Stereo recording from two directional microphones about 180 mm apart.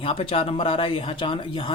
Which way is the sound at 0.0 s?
30° left (ahead or behind).